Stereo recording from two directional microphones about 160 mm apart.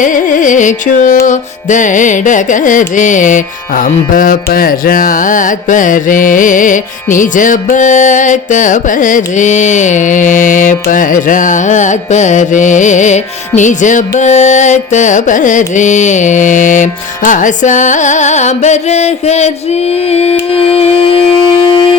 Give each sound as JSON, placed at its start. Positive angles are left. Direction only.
{"t": 0.0, "sound": "carnatic music", "side_deg": 55}
{"t": 19.9, "sound": "music", "side_deg": 40}